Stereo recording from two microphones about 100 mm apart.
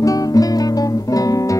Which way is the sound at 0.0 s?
35° left (ahead or behind).